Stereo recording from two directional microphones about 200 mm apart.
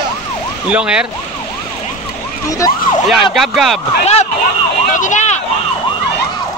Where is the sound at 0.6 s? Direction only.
5° right (ahead or behind).